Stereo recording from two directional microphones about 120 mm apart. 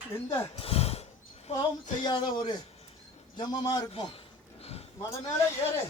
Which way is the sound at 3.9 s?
50° left (ahead or behind).